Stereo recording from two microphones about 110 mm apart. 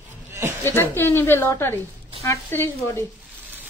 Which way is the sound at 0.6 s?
20° left (ahead or behind).